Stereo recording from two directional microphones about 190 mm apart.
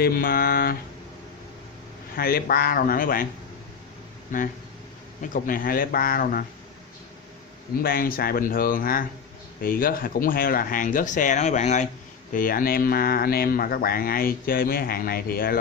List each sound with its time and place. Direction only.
0.0 s speech: 50° left (ahead or behind)
2.1 s speech: 50° left (ahead or behind)
4.3 s speech: 45° left (ahead or behind)
7.8 s speech: 50° left (ahead or behind)